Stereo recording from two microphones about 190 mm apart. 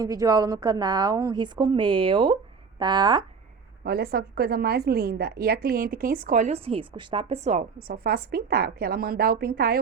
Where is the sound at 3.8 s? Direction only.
55° right (ahead or behind).